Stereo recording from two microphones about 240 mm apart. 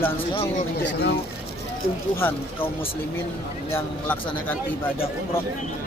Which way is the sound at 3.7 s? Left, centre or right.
Centre.